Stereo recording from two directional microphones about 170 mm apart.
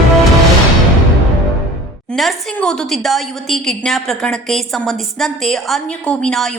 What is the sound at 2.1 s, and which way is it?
A woman's voice, centre (ahead or behind).